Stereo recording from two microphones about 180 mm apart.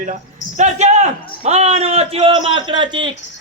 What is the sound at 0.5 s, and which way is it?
A man's voice, 40° right (ahead or behind).